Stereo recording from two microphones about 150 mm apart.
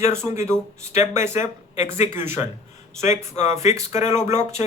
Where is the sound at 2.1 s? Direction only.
15° right (ahead or behind).